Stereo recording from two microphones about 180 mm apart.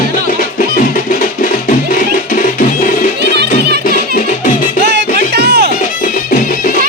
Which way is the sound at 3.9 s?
50° left (ahead or behind).